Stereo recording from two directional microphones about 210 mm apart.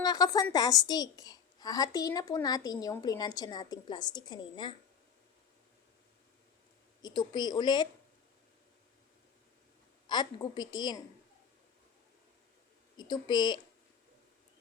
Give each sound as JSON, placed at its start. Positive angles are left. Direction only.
{"t": 0.0, "sound": "a woman's voice", "side_deg": 20}
{"t": 7.0, "sound": "a woman's voice", "side_deg": 20}
{"t": 10.1, "sound": "a woman's voice", "side_deg": 20}
{"t": 13.0, "sound": "a woman's voice", "side_deg": 20}